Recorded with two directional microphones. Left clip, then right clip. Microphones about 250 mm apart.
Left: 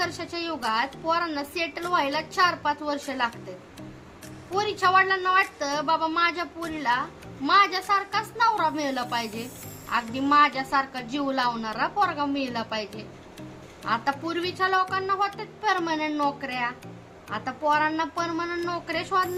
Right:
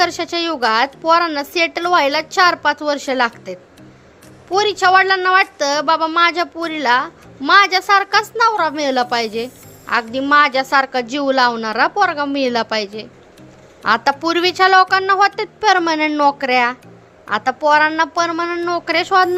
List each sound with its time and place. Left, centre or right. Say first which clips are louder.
0.0 s a woman's voice: right 12 dB; right
4.5 s a woman's voice: right 9 dB; right